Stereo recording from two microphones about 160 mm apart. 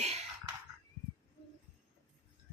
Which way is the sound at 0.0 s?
45° right (ahead or behind).